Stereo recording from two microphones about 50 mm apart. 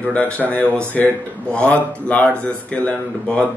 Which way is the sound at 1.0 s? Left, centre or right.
Centre.